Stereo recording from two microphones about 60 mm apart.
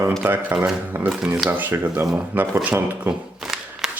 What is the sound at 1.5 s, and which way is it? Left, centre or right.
A man's voice, right.